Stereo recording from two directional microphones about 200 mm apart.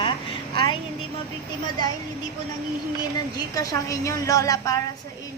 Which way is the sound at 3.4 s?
15° left (ahead or behind).